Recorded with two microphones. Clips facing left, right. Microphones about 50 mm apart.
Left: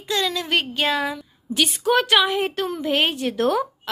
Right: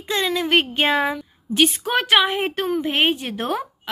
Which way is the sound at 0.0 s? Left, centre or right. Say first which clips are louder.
Right 2 dB; right.